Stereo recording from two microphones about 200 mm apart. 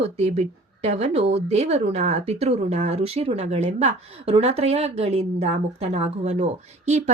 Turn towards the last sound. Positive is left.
turn(degrees=-35)  # may be behind; listen again after turning